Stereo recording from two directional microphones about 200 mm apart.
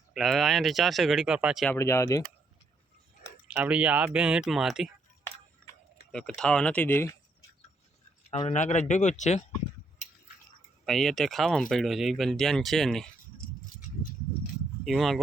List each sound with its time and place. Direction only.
0.1 s speech: centre (ahead or behind)
1.7 s speech: 15° left (ahead or behind)
3.5 s speech: 5° right (ahead or behind)
6.1 s speech: 5° left (ahead or behind)
8.3 s speech: 30° left (ahead or behind)
10.8 s speech: centre (ahead or behind)
14.8 s speech: centre (ahead or behind)